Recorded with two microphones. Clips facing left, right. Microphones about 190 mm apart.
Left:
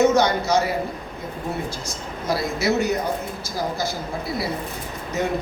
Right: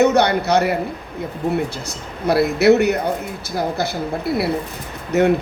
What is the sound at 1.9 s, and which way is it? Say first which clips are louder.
Speech: right 6 dB; 65° right (ahead or behind).